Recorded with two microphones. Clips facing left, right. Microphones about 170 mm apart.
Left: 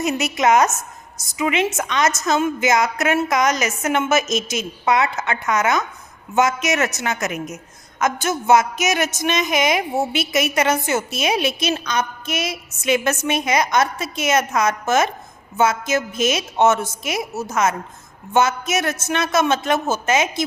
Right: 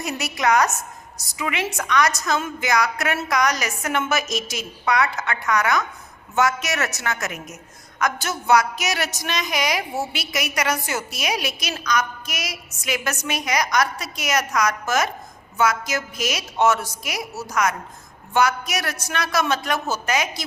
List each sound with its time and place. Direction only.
0.0 s a woman's voice: 20° left (ahead or behind)